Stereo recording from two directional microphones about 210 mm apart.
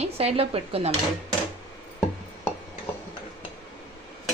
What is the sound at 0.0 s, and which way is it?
Speech, 30° right (ahead or behind).